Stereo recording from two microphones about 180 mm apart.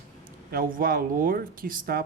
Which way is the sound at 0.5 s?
50° right (ahead or behind).